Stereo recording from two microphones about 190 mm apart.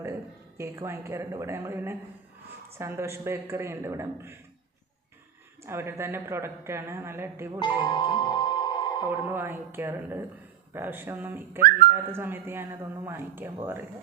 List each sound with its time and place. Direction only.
0.0 s speech: 15° right (ahead or behind)
5.6 s speech: 15° right (ahead or behind)
7.6 s music: 25° left (ahead or behind)
9.3 s speech: 10° right (ahead or behind)